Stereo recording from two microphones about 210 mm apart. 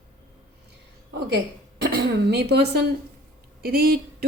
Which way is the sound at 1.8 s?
50° right (ahead or behind).